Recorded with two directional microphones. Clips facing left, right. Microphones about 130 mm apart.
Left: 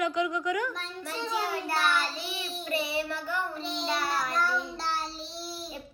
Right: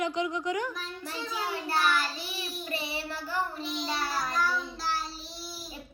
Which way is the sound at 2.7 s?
30° right (ahead or behind).